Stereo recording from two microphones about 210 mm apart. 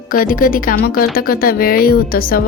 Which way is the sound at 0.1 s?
40° left (ahead or behind).